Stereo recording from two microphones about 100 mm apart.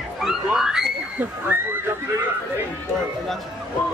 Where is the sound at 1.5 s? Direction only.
15° right (ahead or behind).